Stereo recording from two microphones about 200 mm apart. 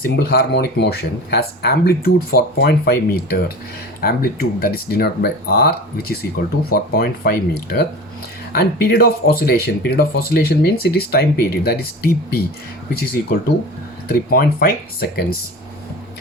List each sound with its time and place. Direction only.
0.0 s speech: 50° left (ahead or behind)